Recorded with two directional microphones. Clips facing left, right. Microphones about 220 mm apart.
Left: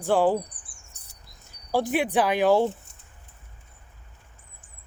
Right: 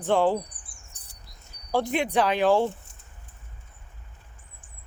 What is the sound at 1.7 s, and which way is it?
Speech, 5° left (ahead or behind).